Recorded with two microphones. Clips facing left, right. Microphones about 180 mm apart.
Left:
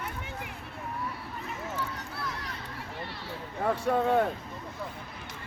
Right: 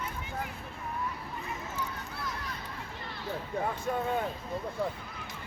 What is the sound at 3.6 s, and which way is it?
Speech, 80° left.